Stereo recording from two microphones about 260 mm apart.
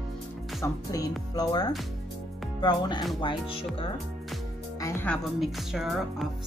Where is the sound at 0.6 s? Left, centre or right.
Centre.